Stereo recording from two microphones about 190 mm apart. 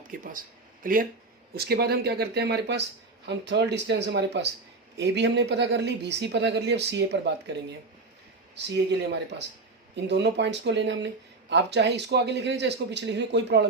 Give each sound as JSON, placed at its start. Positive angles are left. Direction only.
{"t": 0.2, "sound": "speech", "side_deg": -45}
{"t": 8.6, "sound": "speech", "side_deg": -65}
{"t": 9.9, "sound": "speech", "side_deg": -65}